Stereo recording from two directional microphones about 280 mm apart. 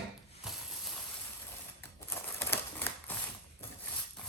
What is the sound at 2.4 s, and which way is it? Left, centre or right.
Typewriter, centre.